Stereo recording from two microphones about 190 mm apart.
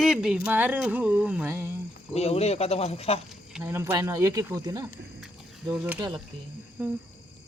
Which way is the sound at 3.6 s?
10° right (ahead or behind).